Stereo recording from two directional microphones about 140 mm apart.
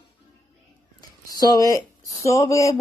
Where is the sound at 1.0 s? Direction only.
30° left (ahead or behind).